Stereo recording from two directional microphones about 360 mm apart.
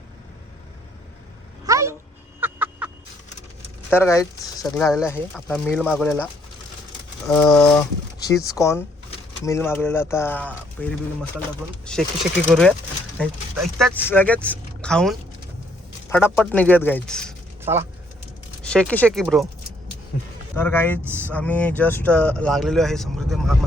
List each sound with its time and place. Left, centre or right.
1.6 s a sound: centre
3.8 s speech: centre
7.3 s speech: centre
12.5 s speech: centre
20.6 s speech: centre